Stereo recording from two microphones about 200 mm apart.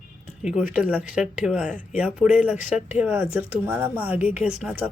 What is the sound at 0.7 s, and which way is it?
Speech, 5° right (ahead or behind).